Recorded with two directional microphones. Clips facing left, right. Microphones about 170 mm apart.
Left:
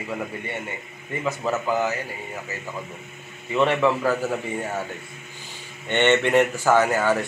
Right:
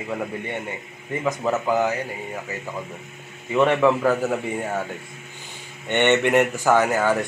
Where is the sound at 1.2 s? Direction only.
15° right (ahead or behind).